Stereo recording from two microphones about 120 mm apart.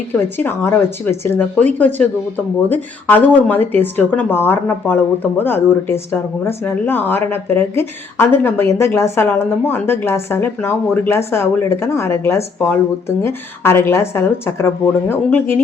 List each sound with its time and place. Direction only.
0.1 s speech: 15° left (ahead or behind)